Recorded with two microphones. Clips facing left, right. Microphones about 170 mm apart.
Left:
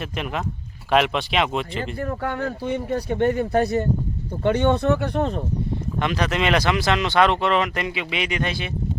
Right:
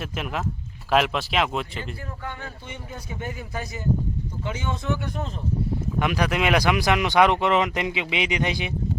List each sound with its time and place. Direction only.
0.0 s speech: centre (ahead or behind)
1.8 s speech: 55° left (ahead or behind)
6.0 s speech: 10° right (ahead or behind)